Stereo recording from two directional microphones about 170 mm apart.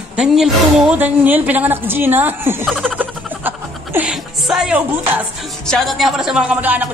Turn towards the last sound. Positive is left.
turn(degrees=-10)  # may be behind; listen again after turning